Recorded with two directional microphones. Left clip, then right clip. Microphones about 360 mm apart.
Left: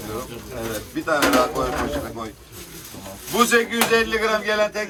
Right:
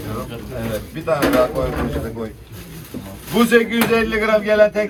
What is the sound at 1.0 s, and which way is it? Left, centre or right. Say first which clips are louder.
Speech: right 2 dB; centre.